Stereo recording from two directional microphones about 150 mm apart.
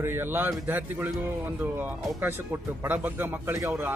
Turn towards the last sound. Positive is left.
turn(degrees=-15)  # may be behind; listen again after turning